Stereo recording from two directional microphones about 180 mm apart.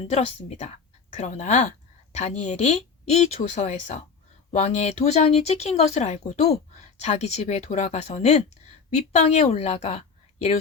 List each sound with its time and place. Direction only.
0.1 s a woman's voice: 35° left (ahead or behind)